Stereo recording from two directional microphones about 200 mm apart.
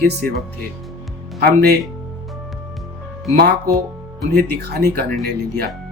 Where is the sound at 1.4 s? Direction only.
50° right (ahead or behind).